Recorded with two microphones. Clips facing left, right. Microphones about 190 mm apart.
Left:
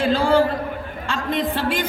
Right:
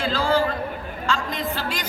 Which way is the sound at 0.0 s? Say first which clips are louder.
Left 5 dB; 55° left (ahead or behind).